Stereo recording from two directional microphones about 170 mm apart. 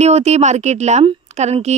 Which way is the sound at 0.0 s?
40° right (ahead or behind).